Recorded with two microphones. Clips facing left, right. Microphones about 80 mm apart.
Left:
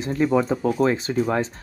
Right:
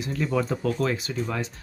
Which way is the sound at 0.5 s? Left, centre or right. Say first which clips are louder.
Left 5 dB; centre.